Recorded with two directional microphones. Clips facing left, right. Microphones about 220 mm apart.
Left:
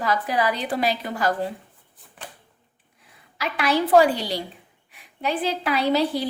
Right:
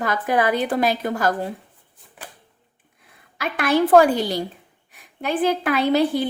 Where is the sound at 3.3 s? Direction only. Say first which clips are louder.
Right 3 dB; 50° right (ahead or behind).